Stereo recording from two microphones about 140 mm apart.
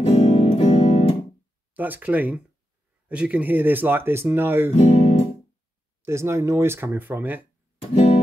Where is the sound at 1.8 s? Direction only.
10° right (ahead or behind).